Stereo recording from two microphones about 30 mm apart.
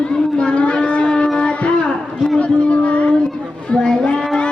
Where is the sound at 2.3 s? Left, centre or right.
Left.